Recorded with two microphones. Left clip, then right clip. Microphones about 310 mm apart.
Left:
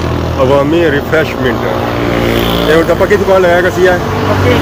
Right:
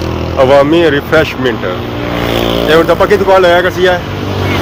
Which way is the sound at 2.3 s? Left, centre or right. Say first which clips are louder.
Right 3 dB; right.